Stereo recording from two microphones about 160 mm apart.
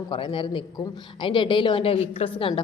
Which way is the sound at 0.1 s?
30° left (ahead or behind).